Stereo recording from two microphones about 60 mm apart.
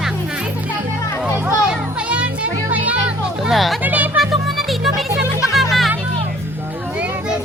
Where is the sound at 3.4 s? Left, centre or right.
Centre.